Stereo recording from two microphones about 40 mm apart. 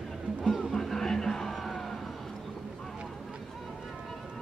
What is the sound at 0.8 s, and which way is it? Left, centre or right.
Music, centre.